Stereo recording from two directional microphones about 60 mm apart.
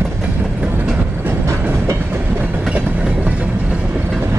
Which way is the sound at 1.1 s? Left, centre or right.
Right.